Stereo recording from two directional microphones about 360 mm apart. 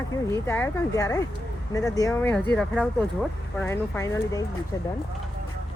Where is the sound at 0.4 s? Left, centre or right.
Centre.